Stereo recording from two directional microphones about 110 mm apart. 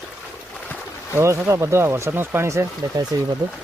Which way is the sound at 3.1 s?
40° right (ahead or behind).